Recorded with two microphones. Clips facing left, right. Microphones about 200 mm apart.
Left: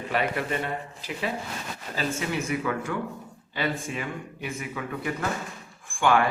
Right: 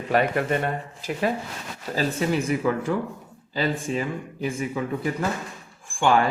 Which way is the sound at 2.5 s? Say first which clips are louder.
Right 5 dB; 30° right (ahead or behind).